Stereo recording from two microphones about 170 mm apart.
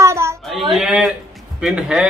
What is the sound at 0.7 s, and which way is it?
Speech, 5° right (ahead or behind).